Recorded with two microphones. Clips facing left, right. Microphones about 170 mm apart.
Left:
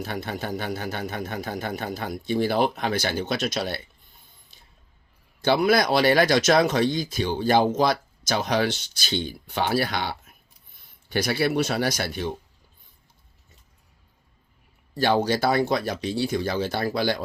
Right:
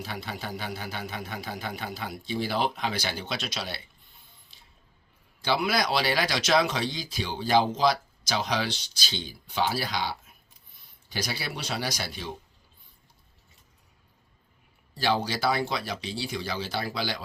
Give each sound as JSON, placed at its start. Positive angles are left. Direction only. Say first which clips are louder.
{"t": 0.0, "sound": "speech", "louder": "left 6 dB", "side_deg": 55}
{"t": 5.4, "sound": "speech", "louder": "left 6 dB", "side_deg": 50}
{"t": 14.9, "sound": "speech", "louder": "left 6 dB", "side_deg": 50}